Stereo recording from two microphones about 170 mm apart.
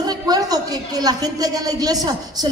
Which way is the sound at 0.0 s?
25° right (ahead or behind).